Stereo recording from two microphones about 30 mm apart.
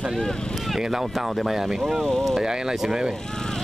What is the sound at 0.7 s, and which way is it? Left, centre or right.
Speech, centre.